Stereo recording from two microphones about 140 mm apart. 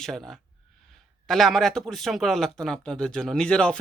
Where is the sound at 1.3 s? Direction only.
Centre (ahead or behind).